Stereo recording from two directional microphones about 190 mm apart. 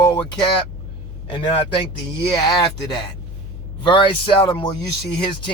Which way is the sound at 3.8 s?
25° left (ahead or behind).